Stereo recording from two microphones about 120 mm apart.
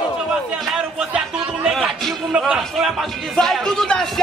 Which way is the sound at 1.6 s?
Centre (ahead or behind).